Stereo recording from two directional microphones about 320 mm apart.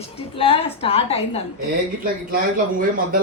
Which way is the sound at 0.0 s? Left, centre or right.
Centre.